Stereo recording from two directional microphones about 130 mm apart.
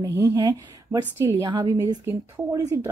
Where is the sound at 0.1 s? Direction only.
25° right (ahead or behind).